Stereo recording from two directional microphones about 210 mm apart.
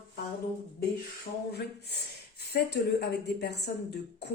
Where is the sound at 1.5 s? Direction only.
50° left (ahead or behind).